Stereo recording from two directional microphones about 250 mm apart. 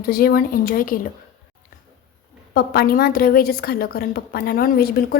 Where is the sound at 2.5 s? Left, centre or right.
Left.